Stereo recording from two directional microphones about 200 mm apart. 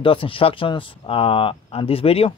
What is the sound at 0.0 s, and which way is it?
Speech, 25° left (ahead or behind).